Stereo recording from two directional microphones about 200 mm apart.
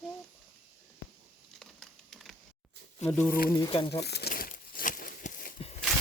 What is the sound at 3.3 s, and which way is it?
Speech, 45° left (ahead or behind).